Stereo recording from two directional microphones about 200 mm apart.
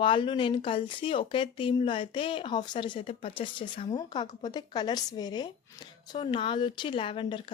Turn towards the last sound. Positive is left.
turn(degrees=25)  # may be behind; listen again after turning